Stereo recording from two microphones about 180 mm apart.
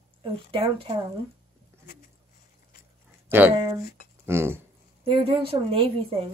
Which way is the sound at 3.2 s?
10° right (ahead or behind).